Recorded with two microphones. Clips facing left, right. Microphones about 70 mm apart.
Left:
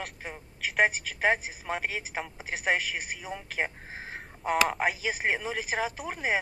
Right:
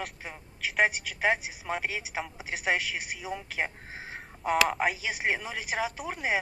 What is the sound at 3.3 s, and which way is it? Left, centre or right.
Speech, centre.